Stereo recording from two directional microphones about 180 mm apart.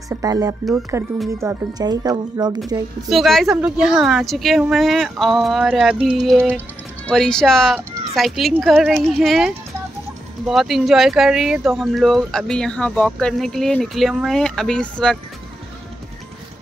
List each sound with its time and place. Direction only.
0.1 s speech: 20° right (ahead or behind)
3.1 s speech: centre (ahead or behind)
7.1 s speech: 5° left (ahead or behind)